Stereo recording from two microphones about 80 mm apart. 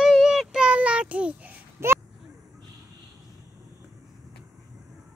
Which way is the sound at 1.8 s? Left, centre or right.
Right.